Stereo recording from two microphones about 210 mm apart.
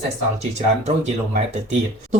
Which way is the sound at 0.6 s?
30° right (ahead or behind).